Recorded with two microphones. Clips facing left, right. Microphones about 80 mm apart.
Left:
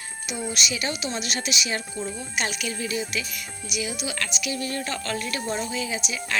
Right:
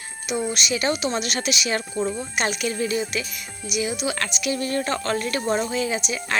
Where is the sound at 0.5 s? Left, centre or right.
Right.